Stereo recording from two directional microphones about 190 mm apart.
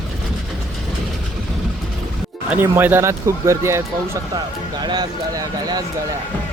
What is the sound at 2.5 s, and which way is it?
Speech, 10° right (ahead or behind).